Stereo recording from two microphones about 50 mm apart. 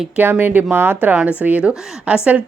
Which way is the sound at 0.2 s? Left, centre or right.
Right.